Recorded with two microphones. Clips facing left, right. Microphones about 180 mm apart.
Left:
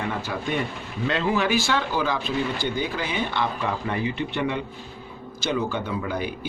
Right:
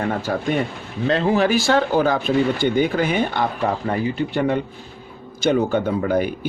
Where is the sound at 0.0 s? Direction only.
50° right (ahead or behind).